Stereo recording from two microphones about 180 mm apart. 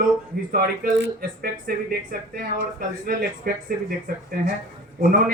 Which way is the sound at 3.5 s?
50° right (ahead or behind).